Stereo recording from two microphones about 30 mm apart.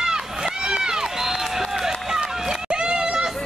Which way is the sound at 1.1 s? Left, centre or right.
Centre.